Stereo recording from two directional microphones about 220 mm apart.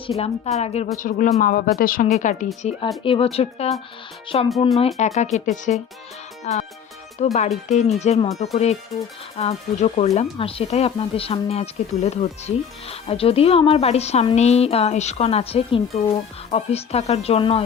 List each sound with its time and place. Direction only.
0.2 s speech: 30° left (ahead or behind)